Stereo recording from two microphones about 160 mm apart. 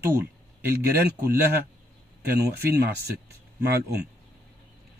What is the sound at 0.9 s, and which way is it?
Speech, 85° right.